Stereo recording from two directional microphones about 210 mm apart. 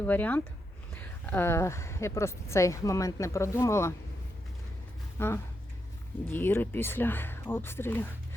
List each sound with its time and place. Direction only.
0.0 s a woman's voice: 10° left (ahead or behind)
5.2 s a woman's voice: 10° left (ahead or behind)